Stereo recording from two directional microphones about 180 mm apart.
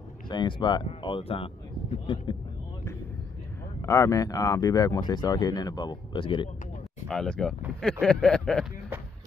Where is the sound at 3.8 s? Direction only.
15° left (ahead or behind).